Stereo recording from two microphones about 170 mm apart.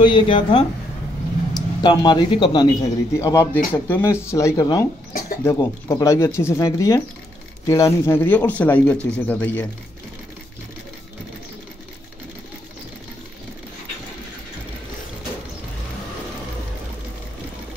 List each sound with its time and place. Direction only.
0.0 s a man's voice: 30° left (ahead or behind); by 9.7 s 10° left (ahead or behind)